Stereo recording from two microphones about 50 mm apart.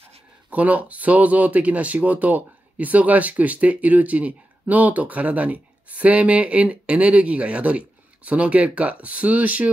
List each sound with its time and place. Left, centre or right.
0.5 s speech: right